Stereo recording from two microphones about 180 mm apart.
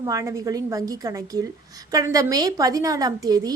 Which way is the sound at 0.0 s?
20° right (ahead or behind).